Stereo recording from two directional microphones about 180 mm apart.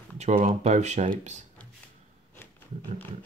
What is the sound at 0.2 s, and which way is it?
Speech, 40° right (ahead or behind).